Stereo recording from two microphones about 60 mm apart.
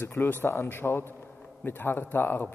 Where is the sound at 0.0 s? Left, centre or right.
Left.